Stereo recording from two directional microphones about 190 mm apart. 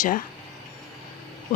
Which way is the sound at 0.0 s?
45° left (ahead or behind).